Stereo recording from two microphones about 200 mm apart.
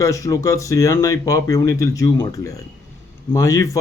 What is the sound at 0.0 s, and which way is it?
Speech, 15° left (ahead or behind).